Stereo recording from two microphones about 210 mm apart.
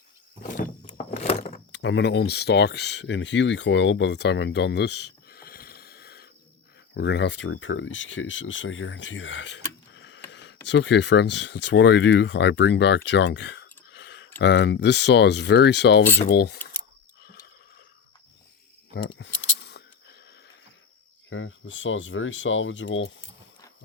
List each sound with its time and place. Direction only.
0.9 s a sound: 30° left (ahead or behind)
1.7 s speech: 55° left (ahead or behind)
18.9 s keys jangling: 60° left (ahead or behind)
21.2 s speech: 65° left (ahead or behind)